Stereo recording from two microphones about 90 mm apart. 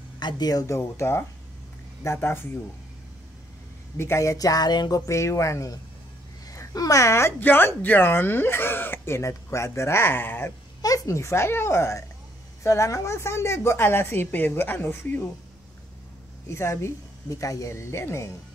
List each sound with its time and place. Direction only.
0.2 s speech: 50° left (ahead or behind)
0.7 s speech: 30° left (ahead or behind)
3.9 s speech: 30° left (ahead or behind); by 5.0 s 50° left (ahead or behind)
5.0 s a woman's voice: 35° left (ahead or behind)
10.8 s speech: 40° left (ahead or behind); by 15.2 s 25° left (ahead or behind)
16.5 s a woman's voice: 30° left (ahead or behind)